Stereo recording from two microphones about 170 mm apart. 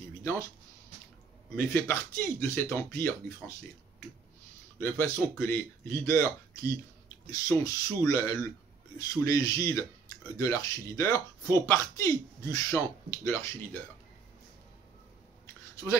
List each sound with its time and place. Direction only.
0.2 s speech: 15° left (ahead or behind)
1.6 s speech: 10° left (ahead or behind)
4.7 s speech: 15° left (ahead or behind)